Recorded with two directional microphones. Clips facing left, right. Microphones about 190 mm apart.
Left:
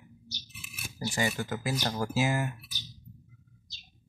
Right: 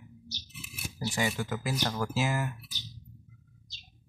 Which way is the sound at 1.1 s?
Centre (ahead or behind).